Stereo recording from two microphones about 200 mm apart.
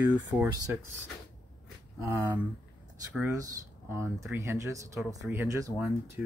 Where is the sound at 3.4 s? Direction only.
15° right (ahead or behind).